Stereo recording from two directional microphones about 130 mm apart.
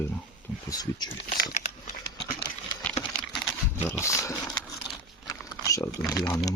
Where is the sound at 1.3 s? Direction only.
75° left (ahead or behind).